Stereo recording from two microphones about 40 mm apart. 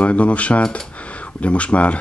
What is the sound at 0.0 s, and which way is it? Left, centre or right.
Speech, left.